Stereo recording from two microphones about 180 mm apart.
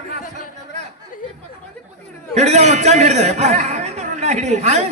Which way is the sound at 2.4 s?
40° right (ahead or behind).